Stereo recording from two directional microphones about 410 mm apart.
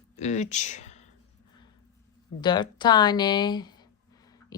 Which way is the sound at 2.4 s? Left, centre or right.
Centre.